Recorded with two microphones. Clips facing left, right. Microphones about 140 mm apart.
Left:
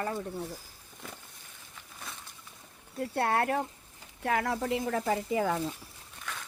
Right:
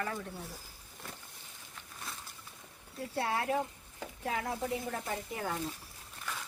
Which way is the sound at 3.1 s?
60° left (ahead or behind).